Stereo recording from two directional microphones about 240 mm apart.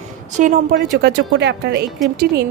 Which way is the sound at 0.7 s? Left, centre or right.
Right.